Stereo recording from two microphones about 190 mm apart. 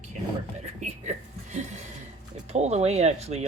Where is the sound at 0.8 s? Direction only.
40° right (ahead or behind).